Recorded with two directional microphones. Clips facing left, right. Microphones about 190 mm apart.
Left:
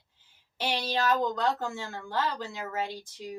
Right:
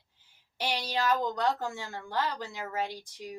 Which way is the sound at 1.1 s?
15° right (ahead or behind).